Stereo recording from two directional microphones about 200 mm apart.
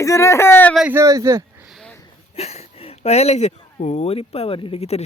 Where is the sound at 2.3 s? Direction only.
30° left (ahead or behind).